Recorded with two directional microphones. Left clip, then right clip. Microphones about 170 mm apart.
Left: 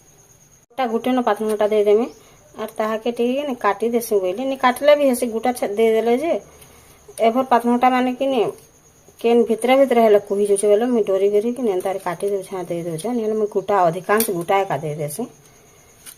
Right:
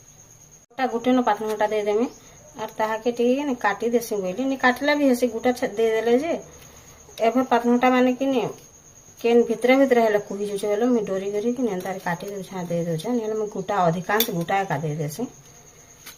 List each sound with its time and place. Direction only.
0.8 s speech: 40° left (ahead or behind)
9.5 s speech: 35° left (ahead or behind)